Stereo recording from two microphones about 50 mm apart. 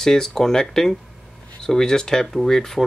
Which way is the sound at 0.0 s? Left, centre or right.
Centre.